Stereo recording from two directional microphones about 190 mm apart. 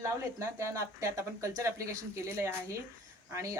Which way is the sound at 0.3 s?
15° right (ahead or behind).